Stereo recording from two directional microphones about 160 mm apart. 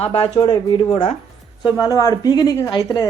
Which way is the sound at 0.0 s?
35° left (ahead or behind).